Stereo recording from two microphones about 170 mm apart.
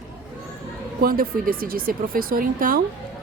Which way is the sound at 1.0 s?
60° right (ahead or behind).